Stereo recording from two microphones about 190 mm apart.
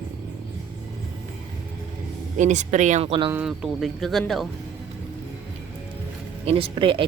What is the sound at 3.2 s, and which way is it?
Speech, 5° right (ahead or behind).